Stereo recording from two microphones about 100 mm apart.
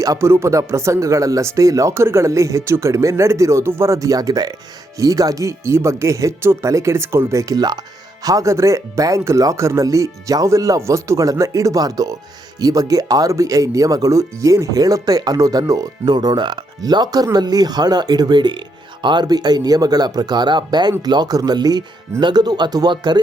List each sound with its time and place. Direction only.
0.0 s speech: 30° right (ahead or behind); by 23.2 s 45° right (ahead or behind)